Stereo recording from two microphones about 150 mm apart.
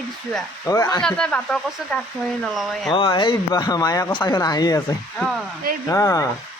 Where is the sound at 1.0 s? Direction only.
5° left (ahead or behind).